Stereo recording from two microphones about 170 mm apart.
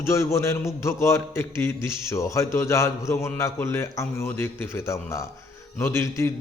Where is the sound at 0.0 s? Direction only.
15° left (ahead or behind).